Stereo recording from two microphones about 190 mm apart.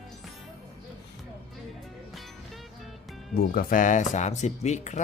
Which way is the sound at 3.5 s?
45° left (ahead or behind).